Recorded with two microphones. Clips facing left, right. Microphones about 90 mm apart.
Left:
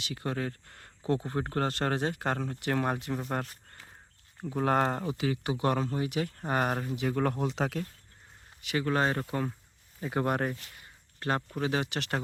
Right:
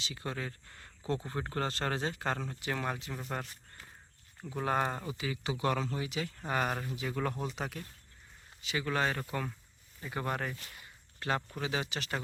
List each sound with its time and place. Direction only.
0.0 s speech: 55° left (ahead or behind)
4.6 s speech: 65° left (ahead or behind)
5.6 s speech: 40° left (ahead or behind)
7.4 s speech: 90° left
8.6 s speech: 50° left (ahead or behind)
8.9 s speech: 30° left (ahead or behind)
10.0 s speech: 55° left (ahead or behind)